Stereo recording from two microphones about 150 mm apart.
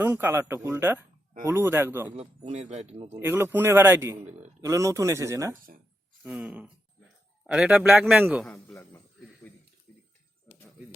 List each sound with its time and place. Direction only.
0.0 s speech: 15° right (ahead or behind)
2.1 s speech: 45° right (ahead or behind)
3.2 s speech: 15° right (ahead or behind)
6.2 s a man's voice: 5° right (ahead or behind)
9.5 s a sound: 10° left (ahead or behind)